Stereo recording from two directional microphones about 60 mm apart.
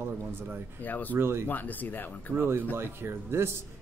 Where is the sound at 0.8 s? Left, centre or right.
Left.